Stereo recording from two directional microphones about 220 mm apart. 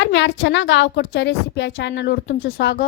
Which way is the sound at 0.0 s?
55° left (ahead or behind).